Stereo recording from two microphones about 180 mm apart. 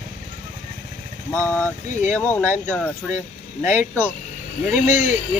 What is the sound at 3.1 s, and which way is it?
Speech, 45° left (ahead or behind).